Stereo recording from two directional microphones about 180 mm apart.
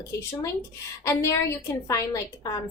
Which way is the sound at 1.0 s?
15° left (ahead or behind).